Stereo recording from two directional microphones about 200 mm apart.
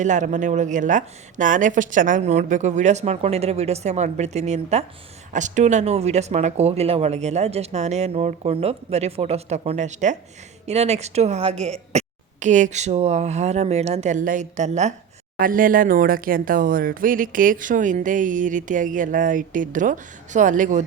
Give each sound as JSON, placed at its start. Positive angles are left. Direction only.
{"t": 0.0, "sound": "speech", "side_deg": -40}